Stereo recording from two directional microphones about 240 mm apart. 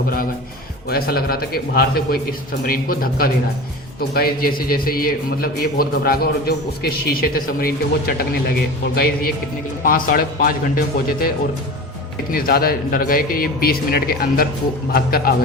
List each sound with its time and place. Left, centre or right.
0.9 s a man's voice: left
12.3 s a man's voice: left